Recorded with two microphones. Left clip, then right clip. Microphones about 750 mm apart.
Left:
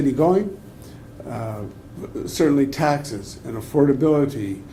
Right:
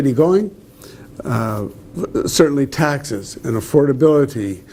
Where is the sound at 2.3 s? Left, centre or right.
Right.